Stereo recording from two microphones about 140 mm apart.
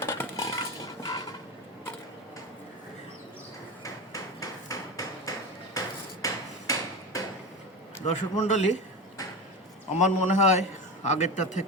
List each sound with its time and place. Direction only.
0.0 s a sound: 20° left (ahead or behind)
3.8 s hammer: 25° left (ahead or behind)
8.0 s a man's voice: 55° left (ahead or behind)
9.9 s a man's voice: 55° left (ahead or behind)